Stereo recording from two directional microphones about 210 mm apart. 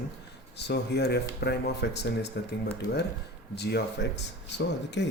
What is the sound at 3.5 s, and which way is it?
Speech, 50° left (ahead or behind).